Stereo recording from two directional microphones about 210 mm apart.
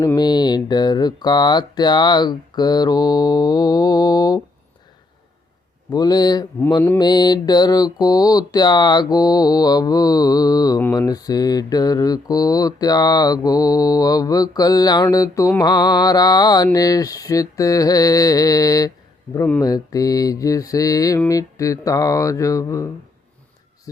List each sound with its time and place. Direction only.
0.0 s speech: 15° left (ahead or behind)
5.9 s speech: 20° left (ahead or behind)
7.0 s mantra: 20° left (ahead or behind)